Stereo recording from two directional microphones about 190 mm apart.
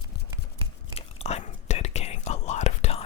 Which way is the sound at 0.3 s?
25° right (ahead or behind).